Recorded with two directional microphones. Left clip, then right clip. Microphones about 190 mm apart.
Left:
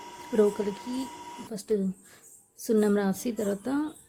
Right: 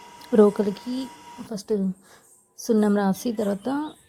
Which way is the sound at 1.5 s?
5° right (ahead or behind).